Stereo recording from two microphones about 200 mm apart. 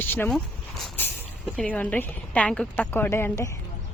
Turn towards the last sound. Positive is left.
turn(degrees=15)  # may be behind; listen again after turning